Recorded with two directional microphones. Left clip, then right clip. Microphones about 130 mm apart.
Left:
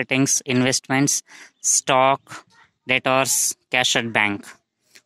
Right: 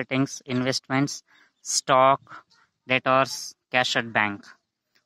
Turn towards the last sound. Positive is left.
turn(degrees=20)  # may be behind; listen again after turning